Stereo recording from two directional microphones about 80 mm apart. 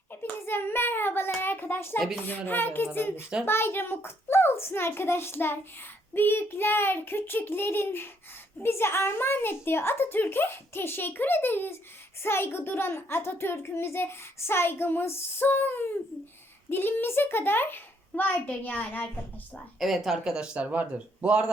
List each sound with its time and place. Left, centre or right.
0.2 s hands: left
1.4 s a sound: left
2.2 s a child's voice: left
19.8 s speech: centre